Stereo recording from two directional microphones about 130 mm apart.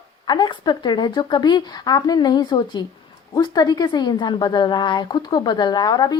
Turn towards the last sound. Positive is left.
turn(degrees=30)  # may be behind; listen again after turning